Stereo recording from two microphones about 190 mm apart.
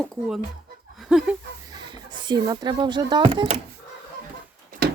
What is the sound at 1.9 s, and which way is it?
Speech, 20° right (ahead or behind).